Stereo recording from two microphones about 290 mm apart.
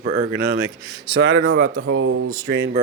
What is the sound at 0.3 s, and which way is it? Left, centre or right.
Speech, right.